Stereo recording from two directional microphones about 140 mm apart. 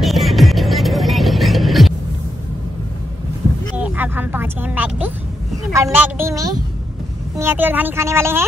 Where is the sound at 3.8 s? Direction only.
10° right (ahead or behind).